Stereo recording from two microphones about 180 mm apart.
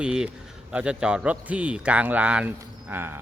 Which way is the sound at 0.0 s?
5° right (ahead or behind).